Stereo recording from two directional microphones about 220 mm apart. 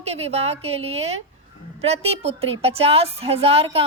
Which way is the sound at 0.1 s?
30° right (ahead or behind).